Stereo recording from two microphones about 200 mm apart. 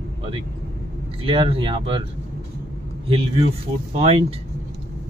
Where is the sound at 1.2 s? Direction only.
25° right (ahead or behind).